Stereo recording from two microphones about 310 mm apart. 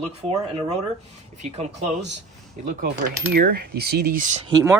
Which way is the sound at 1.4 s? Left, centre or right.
Right.